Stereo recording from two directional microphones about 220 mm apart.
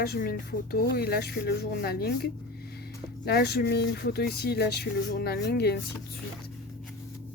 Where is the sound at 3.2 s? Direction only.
45° left (ahead or behind).